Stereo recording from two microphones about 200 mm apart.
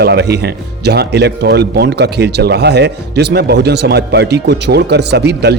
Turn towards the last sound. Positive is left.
turn(degrees=-55)  # may be behind; listen again after turning